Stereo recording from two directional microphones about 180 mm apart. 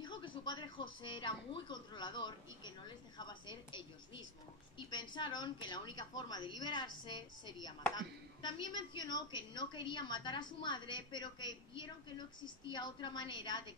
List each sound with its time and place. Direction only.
0.0 s speech: 25° left (ahead or behind)